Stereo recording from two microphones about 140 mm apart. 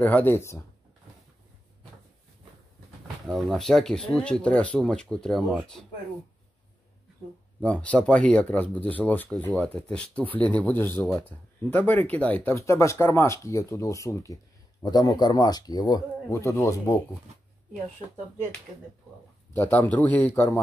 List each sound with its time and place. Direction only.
0.0 s speech: 15° left (ahead or behind)
3.3 s speech: centre (ahead or behind)
7.6 s speech: 10° left (ahead or behind)
19.5 s speech: 15° left (ahead or behind)